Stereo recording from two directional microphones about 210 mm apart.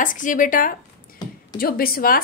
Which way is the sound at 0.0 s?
40° left (ahead or behind).